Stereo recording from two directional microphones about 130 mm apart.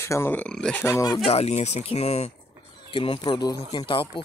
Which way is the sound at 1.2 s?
55° left (ahead or behind).